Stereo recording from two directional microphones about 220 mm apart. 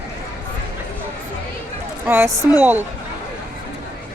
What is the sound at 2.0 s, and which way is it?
Speech, 10° right (ahead or behind).